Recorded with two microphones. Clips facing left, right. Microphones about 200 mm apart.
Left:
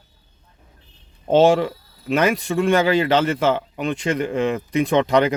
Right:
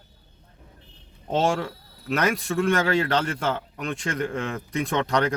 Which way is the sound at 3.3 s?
90° left.